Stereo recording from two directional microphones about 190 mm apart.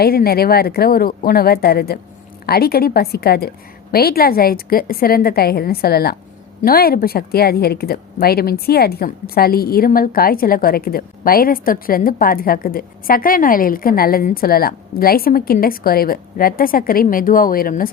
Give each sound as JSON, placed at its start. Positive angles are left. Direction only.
{"t": 0.0, "sound": "a woman's voice", "side_deg": 55}